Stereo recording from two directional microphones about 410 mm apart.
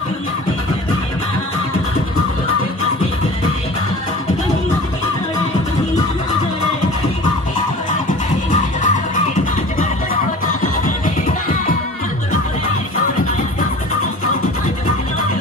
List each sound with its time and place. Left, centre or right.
8.5 s music: centre